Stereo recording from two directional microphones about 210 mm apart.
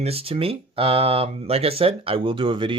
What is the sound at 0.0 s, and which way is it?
Speech, 30° right (ahead or behind).